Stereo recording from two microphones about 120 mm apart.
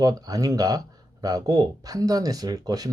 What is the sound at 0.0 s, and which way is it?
Speech, 30° right (ahead or behind).